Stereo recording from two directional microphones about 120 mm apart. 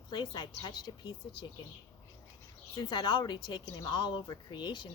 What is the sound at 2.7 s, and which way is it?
Speech, 40° left (ahead or behind).